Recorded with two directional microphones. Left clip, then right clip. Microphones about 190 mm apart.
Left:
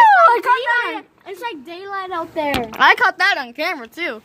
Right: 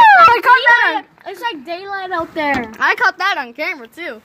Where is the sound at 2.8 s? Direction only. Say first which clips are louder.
Left 3 dB; 30° left (ahead or behind).